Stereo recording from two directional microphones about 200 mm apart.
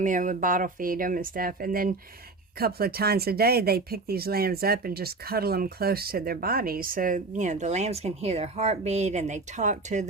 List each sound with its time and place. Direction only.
0.0 s speech: 40° right (ahead or behind)